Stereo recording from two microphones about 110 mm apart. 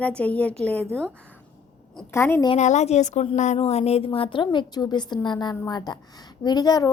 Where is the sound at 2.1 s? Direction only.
20° left (ahead or behind).